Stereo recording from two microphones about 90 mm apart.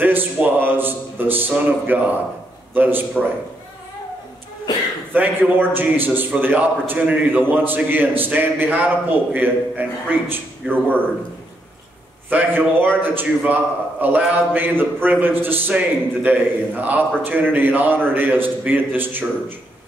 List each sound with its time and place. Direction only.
0.0 s a man's voice: 20° right (ahead or behind)
5.1 s a man's voice: 20° right (ahead or behind)
12.3 s a man's voice: 20° right (ahead or behind)